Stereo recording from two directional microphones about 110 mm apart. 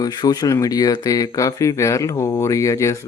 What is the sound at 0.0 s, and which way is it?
Speech, 35° left (ahead or behind).